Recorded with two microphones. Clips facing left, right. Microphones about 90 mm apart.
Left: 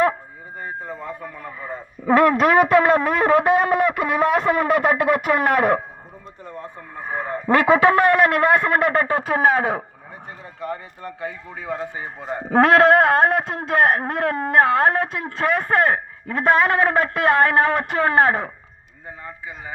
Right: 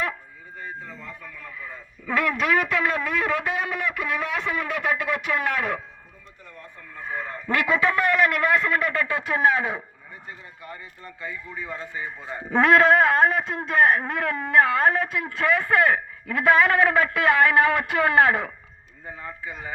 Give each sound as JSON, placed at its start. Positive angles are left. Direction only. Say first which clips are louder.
{"t": 0.6, "sound": "a sound", "louder": "left 6 dB", "side_deg": 50}
{"t": 6.6, "sound": "a sound", "louder": "left 5 dB", "side_deg": 30}
{"t": 7.8, "sound": "a man's voice", "louder": "left 7 dB", "side_deg": 60}
{"t": 8.0, "sound": "speech", "louder": "left 5 dB", "side_deg": 40}
{"t": 10.2, "sound": "a man's voice", "louder": "left 11 dB", "side_deg": 65}
{"t": 19.2, "sound": "a man's voice", "louder": "even", "side_deg": 15}